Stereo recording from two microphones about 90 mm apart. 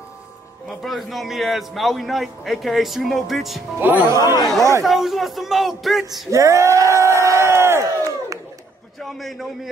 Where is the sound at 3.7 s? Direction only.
20° right (ahead or behind).